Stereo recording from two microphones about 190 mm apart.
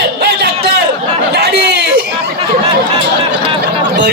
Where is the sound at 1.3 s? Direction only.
60° right (ahead or behind).